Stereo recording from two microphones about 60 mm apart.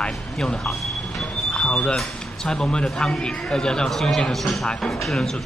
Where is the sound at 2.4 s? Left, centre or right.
Centre.